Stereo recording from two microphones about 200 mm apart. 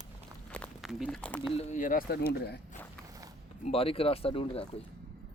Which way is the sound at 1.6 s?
35° left (ahead or behind).